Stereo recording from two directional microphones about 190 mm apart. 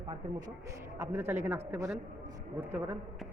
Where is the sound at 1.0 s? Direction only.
10° right (ahead or behind).